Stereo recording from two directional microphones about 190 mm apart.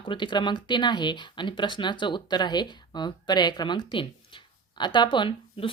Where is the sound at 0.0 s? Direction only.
25° left (ahead or behind).